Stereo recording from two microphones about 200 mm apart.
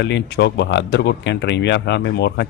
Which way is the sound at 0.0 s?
60° left (ahead or behind).